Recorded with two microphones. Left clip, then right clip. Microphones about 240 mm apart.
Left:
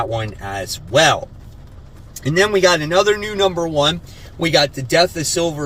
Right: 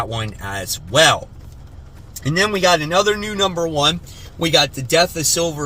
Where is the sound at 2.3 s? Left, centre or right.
Centre.